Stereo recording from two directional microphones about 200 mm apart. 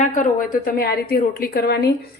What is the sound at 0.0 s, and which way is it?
A woman's voice, 40° left (ahead or behind).